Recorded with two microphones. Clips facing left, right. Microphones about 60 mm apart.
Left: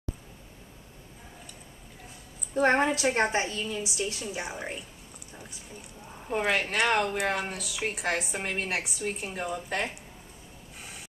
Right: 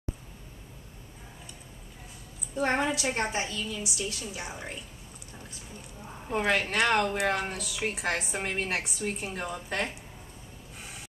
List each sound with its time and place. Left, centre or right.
2.5 s a woman's voice: left
6.2 s speech: centre